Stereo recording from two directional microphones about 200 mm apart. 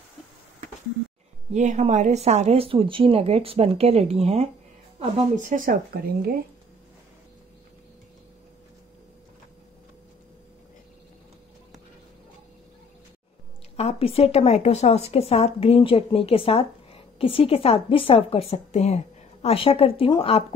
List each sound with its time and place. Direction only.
1.5 s speech: 35° right (ahead or behind)
13.7 s speech: 30° left (ahead or behind)